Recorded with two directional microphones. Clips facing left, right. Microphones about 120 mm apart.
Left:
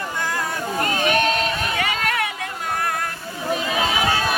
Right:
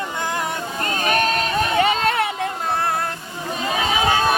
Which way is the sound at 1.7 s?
25° right (ahead or behind).